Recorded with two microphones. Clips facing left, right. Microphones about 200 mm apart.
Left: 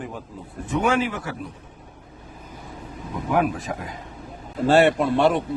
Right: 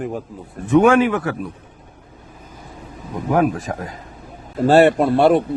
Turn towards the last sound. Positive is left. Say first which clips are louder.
# right 5 dB
turn(degrees=-40)  # may be behind; listen again after turning